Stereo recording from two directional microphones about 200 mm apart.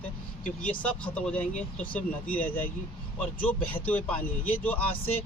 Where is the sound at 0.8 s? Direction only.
5° left (ahead or behind).